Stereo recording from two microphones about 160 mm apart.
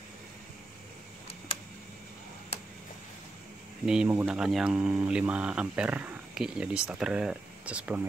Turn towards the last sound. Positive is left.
turn(degrees=-10)  # may be behind; listen again after turning